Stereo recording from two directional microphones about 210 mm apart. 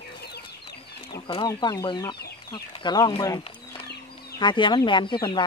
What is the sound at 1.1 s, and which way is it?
Speech, 20° left (ahead or behind).